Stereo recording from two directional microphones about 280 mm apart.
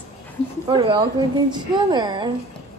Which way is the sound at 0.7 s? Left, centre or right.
Centre.